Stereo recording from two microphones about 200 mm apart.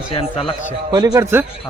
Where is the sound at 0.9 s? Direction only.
20° right (ahead or behind).